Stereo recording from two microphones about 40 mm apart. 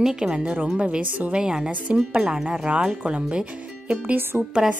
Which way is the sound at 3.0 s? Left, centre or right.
Right.